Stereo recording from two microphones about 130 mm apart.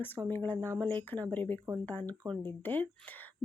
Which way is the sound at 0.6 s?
20° right (ahead or behind).